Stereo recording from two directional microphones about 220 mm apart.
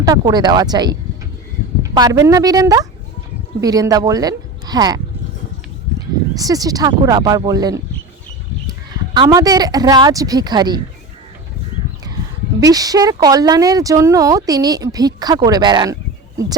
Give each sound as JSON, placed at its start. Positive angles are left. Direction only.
{"t": 0.0, "sound": "speech", "side_deg": -15}
{"t": 6.3, "sound": "speech", "side_deg": -15}
{"t": 9.1, "sound": "speech", "side_deg": -15}
{"t": 12.5, "sound": "speech", "side_deg": -15}